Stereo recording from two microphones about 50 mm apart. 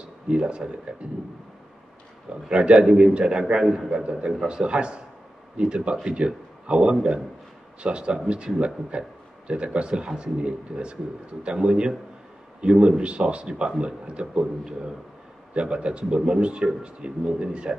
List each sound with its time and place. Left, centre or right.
0.3 s speech: right
2.4 s a man's voice: right